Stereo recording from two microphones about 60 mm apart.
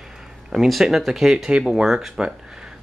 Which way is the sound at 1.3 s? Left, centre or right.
Centre.